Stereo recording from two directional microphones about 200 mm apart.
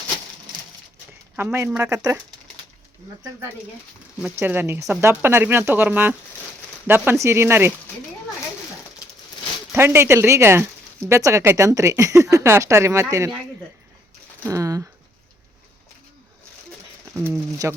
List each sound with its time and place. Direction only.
1.4 s speech: 10° right (ahead or behind)
4.2 s speech: 10° right (ahead or behind)
9.7 s speech: 10° right (ahead or behind)
14.4 s speech: 15° right (ahead or behind)
17.2 s speech: 15° right (ahead or behind)